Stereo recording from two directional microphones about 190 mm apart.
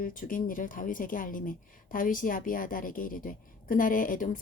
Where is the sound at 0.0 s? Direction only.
45° left (ahead or behind).